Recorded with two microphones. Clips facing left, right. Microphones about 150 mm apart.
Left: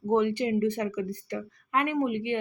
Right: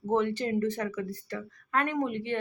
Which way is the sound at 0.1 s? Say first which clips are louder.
Left 3 dB; 15° left (ahead or behind).